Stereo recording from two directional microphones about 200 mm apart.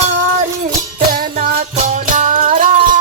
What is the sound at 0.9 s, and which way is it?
Music, 45° right (ahead or behind).